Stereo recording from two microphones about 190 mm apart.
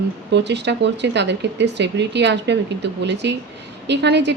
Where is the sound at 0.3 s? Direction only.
65° right (ahead or behind).